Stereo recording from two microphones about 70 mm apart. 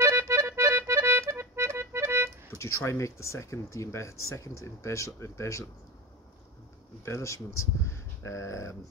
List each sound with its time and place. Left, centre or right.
0.2 s accordion: right
2.5 s speech: left
7.1 s speech: left